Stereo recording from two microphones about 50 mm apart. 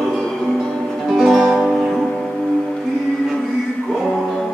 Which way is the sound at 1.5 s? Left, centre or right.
Centre.